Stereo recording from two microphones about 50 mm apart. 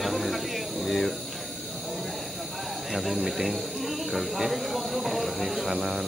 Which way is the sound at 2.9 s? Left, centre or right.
Centre.